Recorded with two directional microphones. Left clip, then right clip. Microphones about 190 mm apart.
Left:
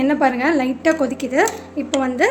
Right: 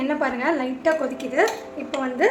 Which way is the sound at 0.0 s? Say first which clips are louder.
Left 6 dB; 45° left (ahead or behind).